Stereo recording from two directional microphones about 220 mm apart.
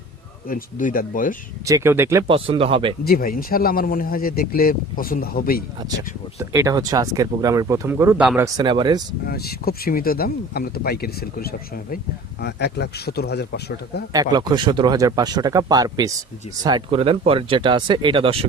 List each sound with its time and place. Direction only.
0.4 s speech: 40° left (ahead or behind)
1.6 s speech: 15° right (ahead or behind)
2.2 s speech: 25° right (ahead or behind)
3.0 s speech: 40° left (ahead or behind)
6.5 s speech: 15° right (ahead or behind)
8.5 s speech: 20° right (ahead or behind)
9.2 s speech: 45° left (ahead or behind)
14.1 s speech: 15° right (ahead or behind)